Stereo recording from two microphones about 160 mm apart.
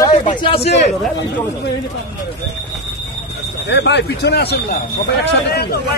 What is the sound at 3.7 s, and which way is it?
Speech, 90° left.